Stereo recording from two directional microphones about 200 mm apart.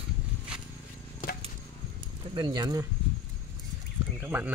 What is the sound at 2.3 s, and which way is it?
Speech, 20° right (ahead or behind).